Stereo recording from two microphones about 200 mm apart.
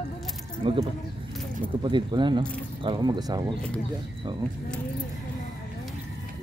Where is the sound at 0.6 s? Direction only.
25° right (ahead or behind).